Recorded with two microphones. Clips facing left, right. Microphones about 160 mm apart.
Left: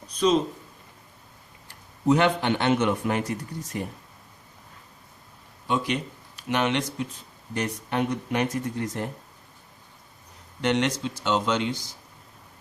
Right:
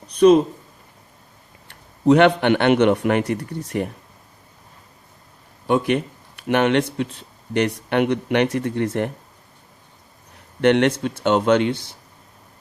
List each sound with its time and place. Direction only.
0.1 s speech: 60° right (ahead or behind)
1.6 s speech: 65° right (ahead or behind)
5.6 s speech: 55° right (ahead or behind)
10.6 s speech: 60° right (ahead or behind)